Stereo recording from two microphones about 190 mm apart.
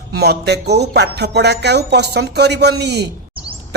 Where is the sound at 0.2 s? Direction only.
60° right (ahead or behind).